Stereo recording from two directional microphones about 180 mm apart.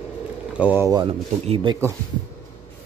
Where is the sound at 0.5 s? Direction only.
10° right (ahead or behind).